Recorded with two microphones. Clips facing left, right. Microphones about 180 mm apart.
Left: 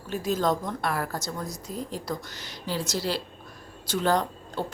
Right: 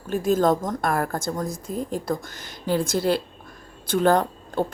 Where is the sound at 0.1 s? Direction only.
50° right (ahead or behind).